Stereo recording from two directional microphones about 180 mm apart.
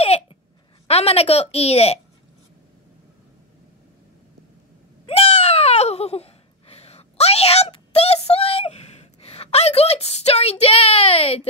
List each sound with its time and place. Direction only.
0.8 s a woman's voice: 35° left (ahead or behind)
5.0 s babbling: 35° left (ahead or behind)